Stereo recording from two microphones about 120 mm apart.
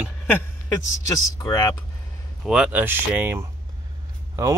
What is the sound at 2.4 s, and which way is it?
Speech, 10° right (ahead or behind).